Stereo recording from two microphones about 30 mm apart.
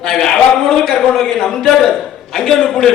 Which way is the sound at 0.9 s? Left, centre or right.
Left.